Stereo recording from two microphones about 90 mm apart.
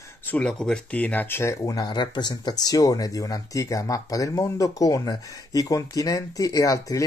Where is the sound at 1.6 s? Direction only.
50° left (ahead or behind).